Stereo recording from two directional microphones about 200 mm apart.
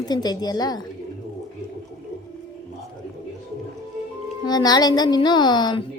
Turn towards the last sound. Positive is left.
turn(degrees=20)  # may be behind; listen again after turning